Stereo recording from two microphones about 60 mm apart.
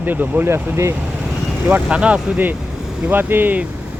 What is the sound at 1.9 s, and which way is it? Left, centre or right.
Speech, centre.